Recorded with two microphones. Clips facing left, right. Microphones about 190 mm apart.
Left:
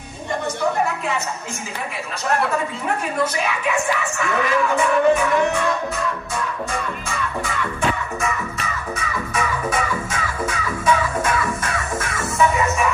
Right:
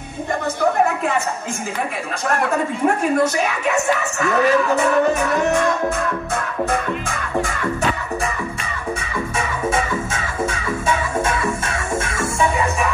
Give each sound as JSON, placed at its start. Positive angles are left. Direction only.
{"t": 0.6, "sound": "a sound", "side_deg": -50}
{"t": 3.0, "sound": "speech", "side_deg": -45}
{"t": 9.0, "sound": "music", "side_deg": -25}